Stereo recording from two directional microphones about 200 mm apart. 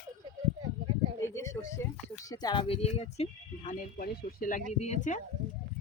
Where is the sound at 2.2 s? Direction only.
20° left (ahead or behind); by 4.6 s 45° left (ahead or behind).